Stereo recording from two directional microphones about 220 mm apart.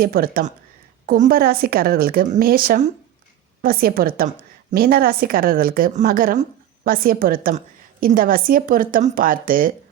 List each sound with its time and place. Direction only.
0.0 s a woman's voice: 40° right (ahead or behind)